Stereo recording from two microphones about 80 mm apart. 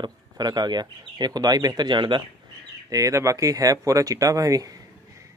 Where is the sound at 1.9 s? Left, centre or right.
Right.